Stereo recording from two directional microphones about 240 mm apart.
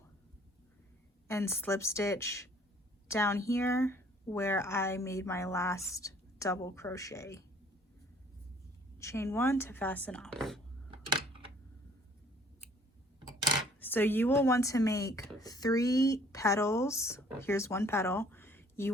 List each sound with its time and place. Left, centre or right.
1.3 s speech: centre
9.0 s speech: centre
10.9 s typewriter: right
13.7 s speech: centre